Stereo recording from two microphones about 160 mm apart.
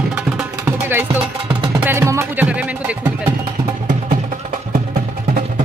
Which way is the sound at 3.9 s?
55° right (ahead or behind).